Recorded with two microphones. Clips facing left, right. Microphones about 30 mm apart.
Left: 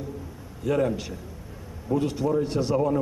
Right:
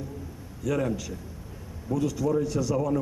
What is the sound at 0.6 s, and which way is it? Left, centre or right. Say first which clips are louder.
Speech: left 3 dB; left.